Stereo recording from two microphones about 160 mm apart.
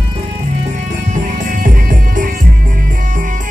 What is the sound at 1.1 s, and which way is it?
Music, 50° right (ahead or behind).